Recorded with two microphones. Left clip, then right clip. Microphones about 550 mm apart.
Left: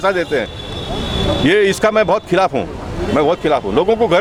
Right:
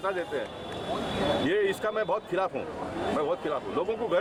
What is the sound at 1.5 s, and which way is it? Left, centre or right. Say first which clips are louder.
Speech: left 14 dB; left.